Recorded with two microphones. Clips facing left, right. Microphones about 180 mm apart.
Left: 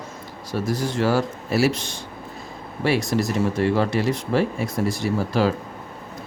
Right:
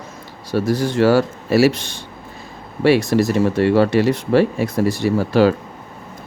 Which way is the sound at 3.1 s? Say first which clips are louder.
Right 6 dB; 75° right (ahead or behind).